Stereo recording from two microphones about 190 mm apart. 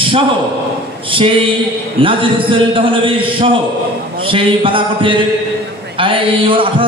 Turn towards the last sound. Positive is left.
turn(degrees=-25)  # may be behind; listen again after turning